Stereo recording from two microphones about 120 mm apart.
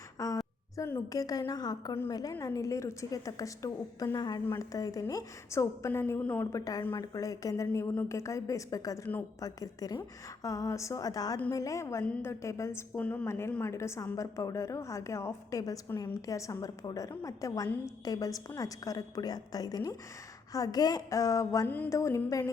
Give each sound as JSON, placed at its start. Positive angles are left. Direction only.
{"t": 0.2, "sound": "a sound", "side_deg": 30}
{"t": 0.8, "sound": "a woman's voice", "side_deg": 25}
{"t": 6.5, "sound": "a woman's voice", "side_deg": 30}